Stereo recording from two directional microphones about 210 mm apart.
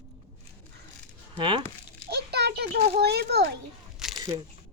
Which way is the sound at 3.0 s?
50° right (ahead or behind).